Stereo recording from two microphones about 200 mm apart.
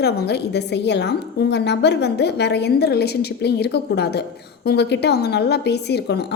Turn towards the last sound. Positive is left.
turn(degrees=55)  # may be behind; listen again after turning